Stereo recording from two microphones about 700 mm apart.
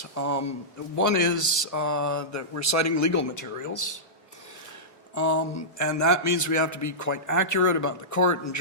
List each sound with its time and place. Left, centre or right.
0.0 s speech: left
5.1 s speech: left